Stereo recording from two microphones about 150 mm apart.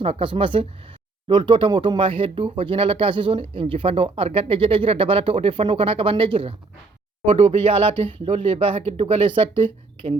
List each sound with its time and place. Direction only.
0.0 s speech: 40° right (ahead or behind)